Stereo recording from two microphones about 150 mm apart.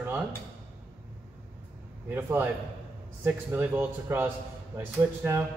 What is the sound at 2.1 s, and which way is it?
A man's voice, 15° right (ahead or behind).